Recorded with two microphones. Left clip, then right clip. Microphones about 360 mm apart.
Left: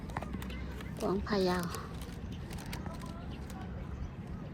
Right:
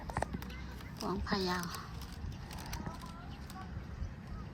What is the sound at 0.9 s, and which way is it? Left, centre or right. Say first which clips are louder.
Speech: left 4 dB; centre.